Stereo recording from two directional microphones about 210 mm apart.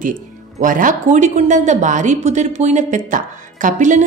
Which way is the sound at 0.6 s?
40° right (ahead or behind).